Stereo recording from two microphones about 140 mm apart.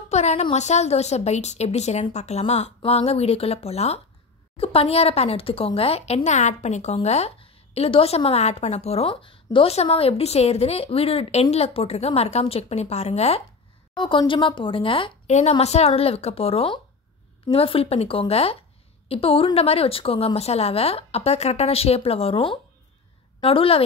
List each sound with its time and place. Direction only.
0.1 s speech: 50° left (ahead or behind)
13.9 s speech: 35° left (ahead or behind)
15.2 s a woman's voice: 55° left (ahead or behind)